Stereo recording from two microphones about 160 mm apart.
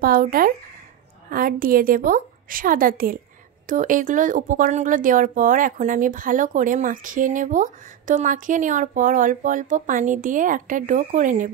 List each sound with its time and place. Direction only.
0.0 s speech: 65° right (ahead or behind)